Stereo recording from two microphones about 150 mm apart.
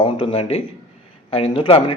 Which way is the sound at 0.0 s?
40° left (ahead or behind).